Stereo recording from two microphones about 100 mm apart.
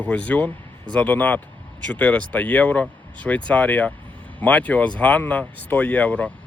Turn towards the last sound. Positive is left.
turn(degrees=15)  # may be behind; listen again after turning